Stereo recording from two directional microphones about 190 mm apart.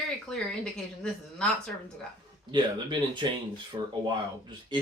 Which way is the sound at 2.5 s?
25° right (ahead or behind).